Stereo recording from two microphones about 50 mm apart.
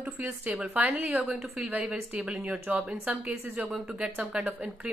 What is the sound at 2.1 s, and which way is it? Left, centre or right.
Speech, right.